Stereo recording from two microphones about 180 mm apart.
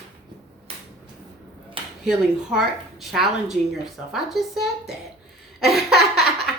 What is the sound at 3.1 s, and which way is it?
Speech, centre (ahead or behind).